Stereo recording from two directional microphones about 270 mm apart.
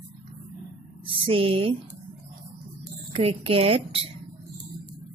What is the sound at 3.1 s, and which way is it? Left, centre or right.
Speech, right.